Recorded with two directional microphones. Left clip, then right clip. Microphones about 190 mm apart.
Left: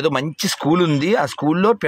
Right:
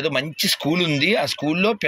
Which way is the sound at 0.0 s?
30° left (ahead or behind).